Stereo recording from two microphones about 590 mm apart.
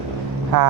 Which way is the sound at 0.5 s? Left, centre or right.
Right.